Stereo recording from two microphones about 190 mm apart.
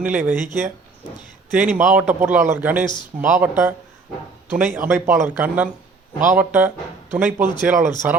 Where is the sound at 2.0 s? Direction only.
40° right (ahead or behind).